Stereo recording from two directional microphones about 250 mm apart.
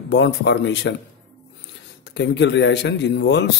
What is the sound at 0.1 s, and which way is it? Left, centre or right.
Speech, left.